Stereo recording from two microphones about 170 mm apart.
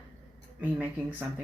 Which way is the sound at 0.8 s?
10° right (ahead or behind).